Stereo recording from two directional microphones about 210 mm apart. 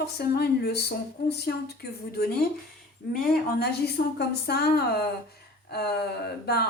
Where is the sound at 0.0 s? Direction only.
50° left (ahead or behind).